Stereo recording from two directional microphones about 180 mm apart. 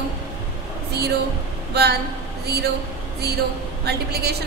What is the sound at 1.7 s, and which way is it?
Speech, 65° right (ahead or behind).